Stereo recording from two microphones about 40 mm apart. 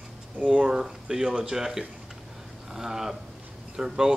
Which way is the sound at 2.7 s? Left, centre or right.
Centre.